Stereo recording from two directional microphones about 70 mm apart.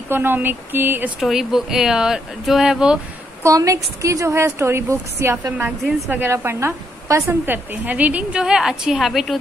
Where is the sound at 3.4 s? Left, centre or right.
Right.